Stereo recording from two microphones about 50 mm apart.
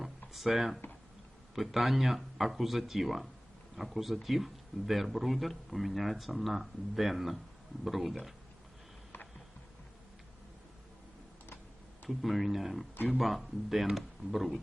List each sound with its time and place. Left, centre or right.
0.3 s speech: centre
9.1 s a sound: left
12.0 s speech: centre